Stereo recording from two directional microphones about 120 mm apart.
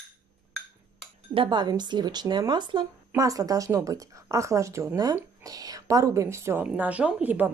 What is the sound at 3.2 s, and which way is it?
A woman's voice, 30° right (ahead or behind).